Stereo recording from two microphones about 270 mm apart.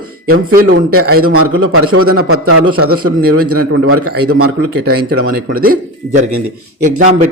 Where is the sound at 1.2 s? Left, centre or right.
Right.